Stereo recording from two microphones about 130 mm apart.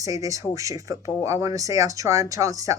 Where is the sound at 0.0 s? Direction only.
25° right (ahead or behind).